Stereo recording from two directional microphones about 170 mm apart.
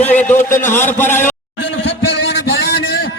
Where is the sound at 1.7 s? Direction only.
90° left.